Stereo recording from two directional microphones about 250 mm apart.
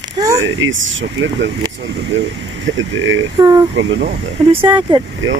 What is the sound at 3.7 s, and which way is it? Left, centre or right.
Speech, right.